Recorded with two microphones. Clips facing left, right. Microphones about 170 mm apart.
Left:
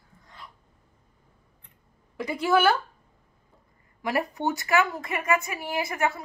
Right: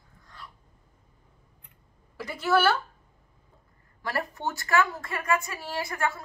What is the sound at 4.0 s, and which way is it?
A woman's voice, 15° left (ahead or behind).